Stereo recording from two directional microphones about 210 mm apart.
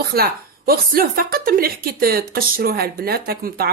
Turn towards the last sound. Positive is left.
turn(degrees=-45)  # may be behind; listen again after turning